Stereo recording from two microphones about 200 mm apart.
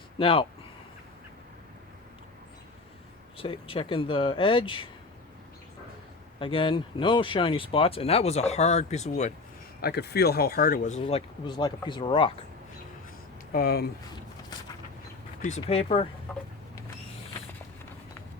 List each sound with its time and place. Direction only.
0.2 s speech: 25° left (ahead or behind)
3.3 s speech: 25° left (ahead or behind)
6.4 s speech: 25° left (ahead or behind)
9.8 s speech: 55° left (ahead or behind); by 11.2 s 35° left (ahead or behind)
11.4 s speech: 20° left (ahead or behind)
13.5 s speech: 50° left (ahead or behind)
15.4 s speech: 35° left (ahead or behind)